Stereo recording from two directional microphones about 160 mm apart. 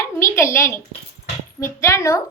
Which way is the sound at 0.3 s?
15° left (ahead or behind).